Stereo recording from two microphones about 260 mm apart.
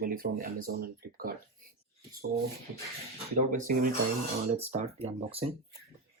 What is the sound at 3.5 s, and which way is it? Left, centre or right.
Speech, right.